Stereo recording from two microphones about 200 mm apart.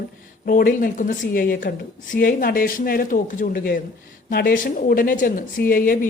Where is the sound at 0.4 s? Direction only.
45° left (ahead or behind).